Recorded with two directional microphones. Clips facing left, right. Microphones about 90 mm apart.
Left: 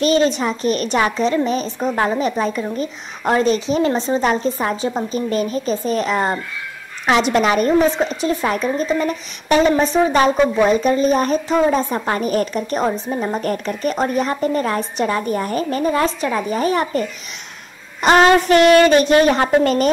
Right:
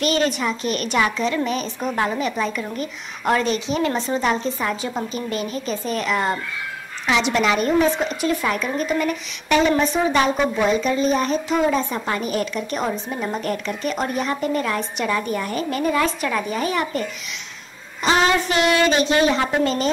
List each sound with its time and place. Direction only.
0.0 s a woman's voice: 30° left (ahead or behind)
18.0 s a woman's voice: 55° left (ahead or behind)